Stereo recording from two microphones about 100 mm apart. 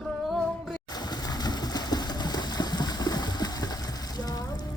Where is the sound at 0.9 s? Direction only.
45° left (ahead or behind).